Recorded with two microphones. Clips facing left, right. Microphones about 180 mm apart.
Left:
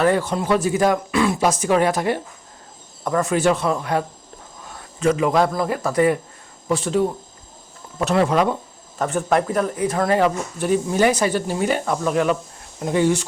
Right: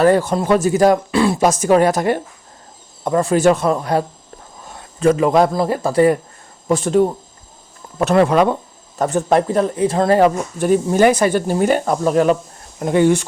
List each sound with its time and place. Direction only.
0.0 s speech: 40° right (ahead or behind)
1.4 s speech: 45° right (ahead or behind)
3.0 s speech: 25° right (ahead or behind)
4.8 s a sound: 35° right (ahead or behind)
5.4 s speech: 30° right (ahead or behind)
6.7 s speech: 45° right (ahead or behind)
7.9 s speech: 55° right (ahead or behind)
9.0 s speech: 40° right (ahead or behind)
10.2 s speech: 45° right (ahead or behind)
12.8 s speech: 60° right (ahead or behind)